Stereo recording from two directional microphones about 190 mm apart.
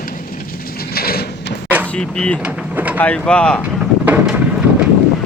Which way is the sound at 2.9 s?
5° left (ahead or behind).